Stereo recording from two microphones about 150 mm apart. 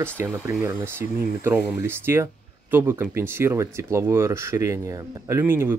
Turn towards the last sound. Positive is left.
turn(degrees=-15)  # may be behind; listen again after turning